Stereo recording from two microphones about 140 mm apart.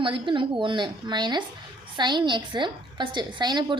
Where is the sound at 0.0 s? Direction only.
35° right (ahead or behind).